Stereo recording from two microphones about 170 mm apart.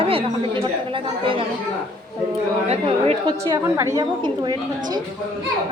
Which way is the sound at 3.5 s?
20° right (ahead or behind).